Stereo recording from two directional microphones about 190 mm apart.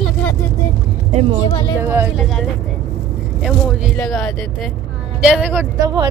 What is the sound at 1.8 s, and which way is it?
Speech, 10° right (ahead or behind).